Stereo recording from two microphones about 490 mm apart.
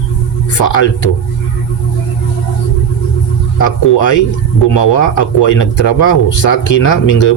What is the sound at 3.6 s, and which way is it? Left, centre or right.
Speech, left.